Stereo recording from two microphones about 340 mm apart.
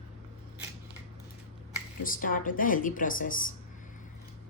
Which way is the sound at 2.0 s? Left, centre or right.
Left.